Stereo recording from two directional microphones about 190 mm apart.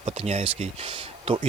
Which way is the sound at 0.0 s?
35° right (ahead or behind).